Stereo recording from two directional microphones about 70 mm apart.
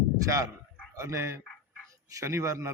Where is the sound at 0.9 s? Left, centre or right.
Right.